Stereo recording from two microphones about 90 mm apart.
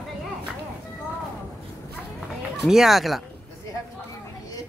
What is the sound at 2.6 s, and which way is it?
Speech, 5° right (ahead or behind).